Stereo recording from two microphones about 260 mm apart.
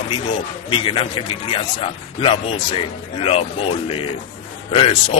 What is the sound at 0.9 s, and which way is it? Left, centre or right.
Speech, centre.